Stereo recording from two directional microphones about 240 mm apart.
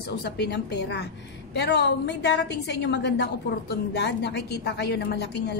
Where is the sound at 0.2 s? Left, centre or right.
Left.